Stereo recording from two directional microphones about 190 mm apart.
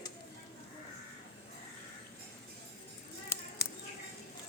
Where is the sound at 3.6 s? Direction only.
60° left (ahead or behind).